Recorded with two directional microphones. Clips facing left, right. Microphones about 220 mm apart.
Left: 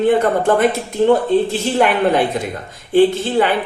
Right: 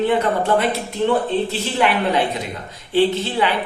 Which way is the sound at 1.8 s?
50° left (ahead or behind).